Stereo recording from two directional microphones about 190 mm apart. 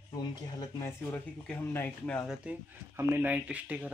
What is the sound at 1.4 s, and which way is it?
Speech, 10° left (ahead or behind).